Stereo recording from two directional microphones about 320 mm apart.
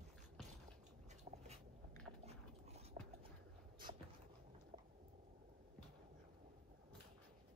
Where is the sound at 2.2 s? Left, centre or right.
Centre.